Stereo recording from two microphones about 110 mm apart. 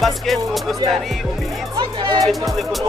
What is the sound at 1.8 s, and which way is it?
Music, 45° right (ahead or behind).